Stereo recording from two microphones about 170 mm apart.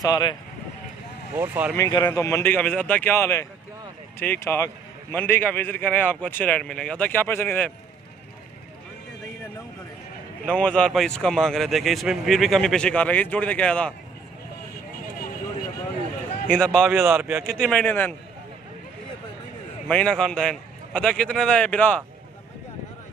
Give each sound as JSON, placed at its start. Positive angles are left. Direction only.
{"t": 0.0, "sound": "speech", "side_deg": 25}
{"t": 1.3, "sound": "a man's voice", "side_deg": -15}
{"t": 1.8, "sound": "a man's voice", "side_deg": 25}
{"t": 10.4, "sound": "speech", "side_deg": 5}
{"t": 16.4, "sound": "speech", "side_deg": 5}
{"t": 17.0, "sound": "a man's voice", "side_deg": -10}
{"t": 17.5, "sound": "speech", "side_deg": 5}
{"t": 19.9, "sound": "speech", "side_deg": 5}